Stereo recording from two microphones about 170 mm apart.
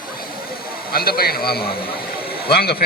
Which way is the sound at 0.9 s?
65° left (ahead or behind).